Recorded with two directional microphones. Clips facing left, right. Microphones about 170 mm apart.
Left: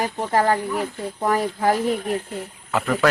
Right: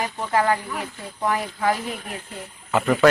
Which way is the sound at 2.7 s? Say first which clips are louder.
Right 3 dB; 5° right (ahead or behind).